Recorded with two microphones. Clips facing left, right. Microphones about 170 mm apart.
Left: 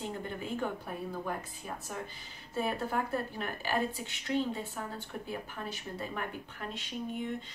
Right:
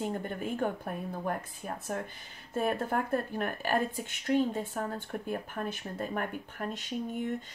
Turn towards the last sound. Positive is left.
turn(degrees=-45)  # may be behind; listen again after turning